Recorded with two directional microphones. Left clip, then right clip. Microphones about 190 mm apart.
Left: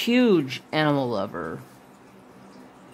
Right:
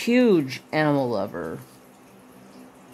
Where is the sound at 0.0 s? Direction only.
10° right (ahead or behind).